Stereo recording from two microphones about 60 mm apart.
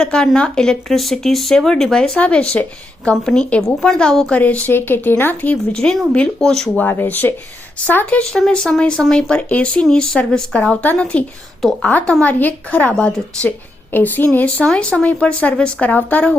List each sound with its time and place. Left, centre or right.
0.0 s a woman's voice: centre
4.3 s speech: left
5.7 s a woman's voice: centre
6.7 s speech: left
8.3 s a woman's voice: centre
9.5 s speech: left
9.9 s a woman's voice: centre
13.9 s speech: left
14.3 s speech: left